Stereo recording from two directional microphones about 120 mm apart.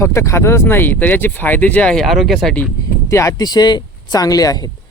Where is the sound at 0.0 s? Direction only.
25° left (ahead or behind); by 2.6 s centre (ahead or behind).